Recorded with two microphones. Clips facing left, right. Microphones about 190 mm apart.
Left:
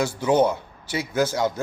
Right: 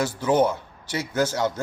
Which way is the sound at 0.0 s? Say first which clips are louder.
Left 1 dB; 10° left (ahead or behind).